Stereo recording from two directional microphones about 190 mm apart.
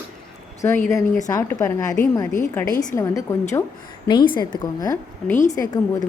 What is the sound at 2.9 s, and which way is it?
Speech, 15° left (ahead or behind).